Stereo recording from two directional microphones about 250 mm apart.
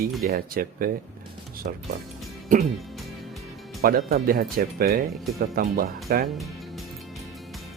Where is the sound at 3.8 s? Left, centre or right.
Right.